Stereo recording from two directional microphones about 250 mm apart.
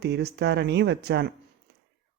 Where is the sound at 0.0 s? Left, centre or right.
Right.